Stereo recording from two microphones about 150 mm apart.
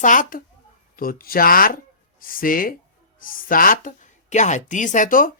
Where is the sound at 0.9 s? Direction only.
75° left (ahead or behind).